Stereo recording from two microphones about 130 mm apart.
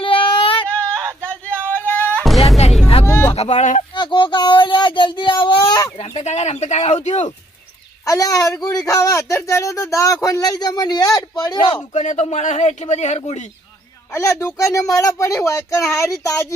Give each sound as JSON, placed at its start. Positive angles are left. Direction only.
{"t": 0.0, "sound": "female singing", "side_deg": 45}
{"t": 0.7, "sound": "a sound", "side_deg": 10}
{"t": 3.0, "sound": "music", "side_deg": 20}
{"t": 3.3, "sound": "speech", "side_deg": 60}
{"t": 3.9, "sound": "speech", "side_deg": 35}
{"t": 6.0, "sound": "speech", "side_deg": 50}
{"t": 8.0, "sound": "speech", "side_deg": 25}
{"t": 11.9, "sound": "speech", "side_deg": 60}
{"t": 14.1, "sound": "speech", "side_deg": 20}